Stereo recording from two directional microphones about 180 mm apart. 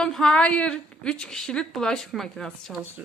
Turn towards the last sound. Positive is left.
turn(degrees=-10)  # may be behind; listen again after turning